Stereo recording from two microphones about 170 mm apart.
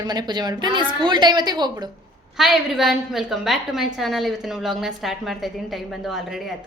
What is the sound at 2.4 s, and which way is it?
A woman's voice, centre (ahead or behind).